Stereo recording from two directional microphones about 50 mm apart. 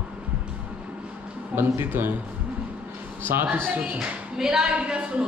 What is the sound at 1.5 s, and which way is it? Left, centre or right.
Speech, right.